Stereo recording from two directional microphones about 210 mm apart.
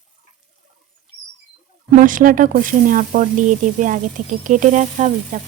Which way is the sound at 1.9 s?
40° right (ahead or behind).